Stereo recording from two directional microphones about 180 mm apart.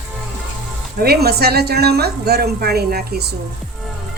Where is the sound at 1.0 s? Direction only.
60° right (ahead or behind).